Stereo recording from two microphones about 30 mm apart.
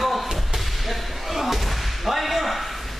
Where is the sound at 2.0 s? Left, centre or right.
Centre.